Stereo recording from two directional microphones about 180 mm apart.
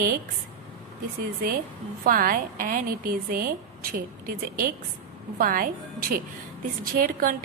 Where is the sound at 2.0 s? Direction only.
50° right (ahead or behind).